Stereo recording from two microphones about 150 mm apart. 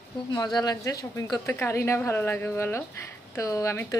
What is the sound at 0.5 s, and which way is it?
A woman's voice, 25° left (ahead or behind).